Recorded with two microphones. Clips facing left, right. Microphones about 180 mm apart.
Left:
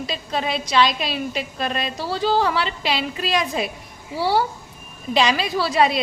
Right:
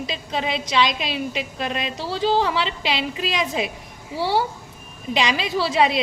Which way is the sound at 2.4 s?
50° left (ahead or behind).